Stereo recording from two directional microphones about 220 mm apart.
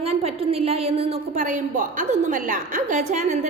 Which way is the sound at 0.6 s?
25° right (ahead or behind).